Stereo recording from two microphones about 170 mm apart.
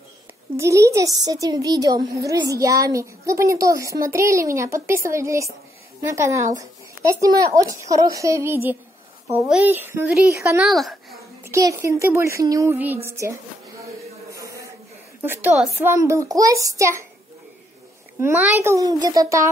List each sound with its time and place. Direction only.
0.6 s a woman's voice: 15° right (ahead or behind)
10.6 s speech: centre (ahead or behind)
11.4 s speech: 15° right (ahead or behind)
14.3 s a sound: 20° right (ahead or behind)
15.2 s speech: 10° right (ahead or behind)
15.9 s a woman's voice: 15° right (ahead or behind)
18.2 s speech: 15° right (ahead or behind)